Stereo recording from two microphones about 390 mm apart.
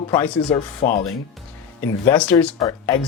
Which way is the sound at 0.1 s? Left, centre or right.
Centre.